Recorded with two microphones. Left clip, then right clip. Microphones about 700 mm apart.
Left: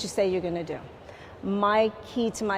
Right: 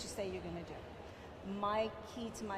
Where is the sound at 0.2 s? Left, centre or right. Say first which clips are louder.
Left 18 dB; left.